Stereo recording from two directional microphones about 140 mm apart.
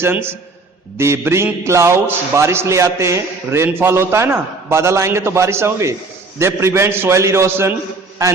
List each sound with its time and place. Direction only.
0.0 s a man's voice: 15° right (ahead or behind)